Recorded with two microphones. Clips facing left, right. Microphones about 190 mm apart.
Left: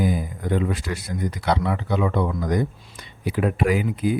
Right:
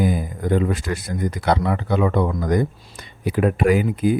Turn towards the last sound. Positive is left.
turn(degrees=-50)  # may be behind; listen again after turning